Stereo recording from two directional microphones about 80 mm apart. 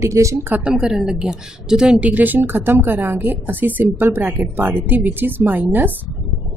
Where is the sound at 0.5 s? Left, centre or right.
Centre.